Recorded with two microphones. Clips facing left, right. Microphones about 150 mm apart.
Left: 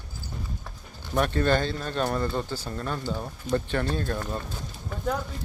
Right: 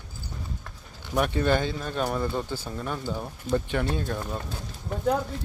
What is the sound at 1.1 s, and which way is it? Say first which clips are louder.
A man's voice: even; 10° right (ahead or behind).